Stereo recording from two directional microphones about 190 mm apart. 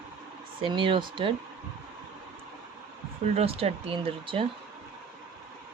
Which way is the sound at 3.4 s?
30° right (ahead or behind).